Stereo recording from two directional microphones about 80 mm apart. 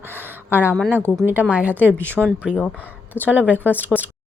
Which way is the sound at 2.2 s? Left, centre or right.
Centre.